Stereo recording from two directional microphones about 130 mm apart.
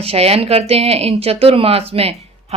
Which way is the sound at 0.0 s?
50° right (ahead or behind).